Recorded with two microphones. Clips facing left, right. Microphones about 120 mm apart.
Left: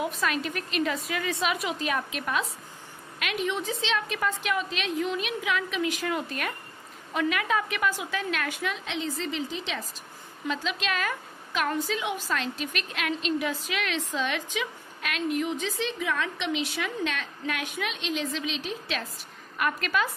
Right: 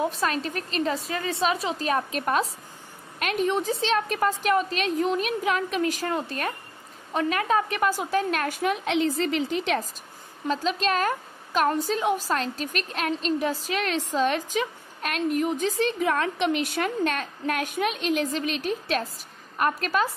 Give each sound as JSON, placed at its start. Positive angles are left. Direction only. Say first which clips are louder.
{"t": 0.0, "sound": "a woman's voice", "louder": "right 3 dB", "side_deg": -35}
{"t": 10.4, "sound": "a woman's voice", "louder": "right 5 dB", "side_deg": -40}